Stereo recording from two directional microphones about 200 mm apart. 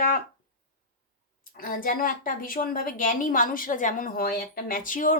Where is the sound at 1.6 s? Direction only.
45° left (ahead or behind).